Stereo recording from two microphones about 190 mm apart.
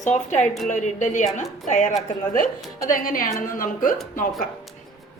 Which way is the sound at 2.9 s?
45° left (ahead or behind).